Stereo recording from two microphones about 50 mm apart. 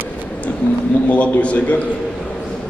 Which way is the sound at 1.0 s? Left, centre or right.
Left.